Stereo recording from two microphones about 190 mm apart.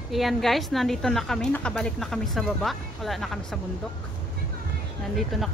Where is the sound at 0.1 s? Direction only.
Centre (ahead or behind).